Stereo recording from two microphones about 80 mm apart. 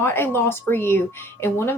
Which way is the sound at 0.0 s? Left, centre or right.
Left.